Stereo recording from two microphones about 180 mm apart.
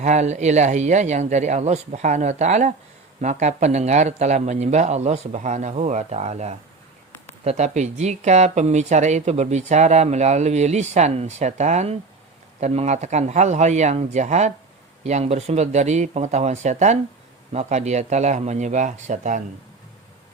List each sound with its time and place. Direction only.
0.0 s speech: 40° right (ahead or behind)